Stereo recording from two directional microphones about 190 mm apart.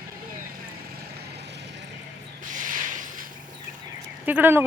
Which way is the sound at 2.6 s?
45° right (ahead or behind).